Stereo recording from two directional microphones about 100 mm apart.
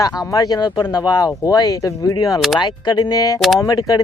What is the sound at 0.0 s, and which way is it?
Speech, 40° left (ahead or behind).